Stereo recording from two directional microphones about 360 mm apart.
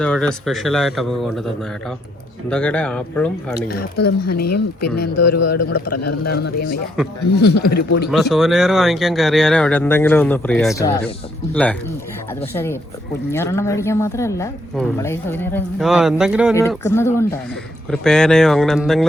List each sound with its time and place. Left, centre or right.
0.0 s speech: centre
2.5 s speech: centre
3.7 s speech: left
5.4 s a man's voice: left
6.2 s speech: left
8.1 s speech: centre
13.3 s a woman's voice: centre